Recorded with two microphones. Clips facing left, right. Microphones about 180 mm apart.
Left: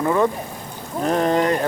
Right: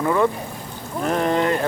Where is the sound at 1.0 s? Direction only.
35° left (ahead or behind).